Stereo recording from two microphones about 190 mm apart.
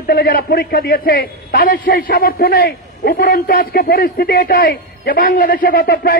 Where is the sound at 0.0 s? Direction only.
50° left (ahead or behind).